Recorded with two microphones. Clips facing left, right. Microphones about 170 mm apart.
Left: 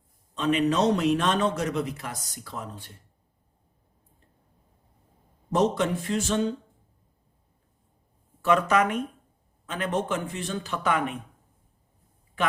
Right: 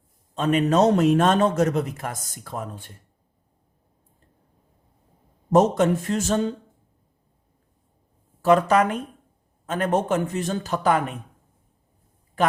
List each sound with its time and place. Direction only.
0.3 s a man's voice: 45° right (ahead or behind)
5.5 s a man's voice: 45° right (ahead or behind)
8.4 s a man's voice: 35° right (ahead or behind)